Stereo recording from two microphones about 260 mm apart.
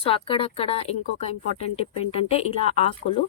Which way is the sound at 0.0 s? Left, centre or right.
Left.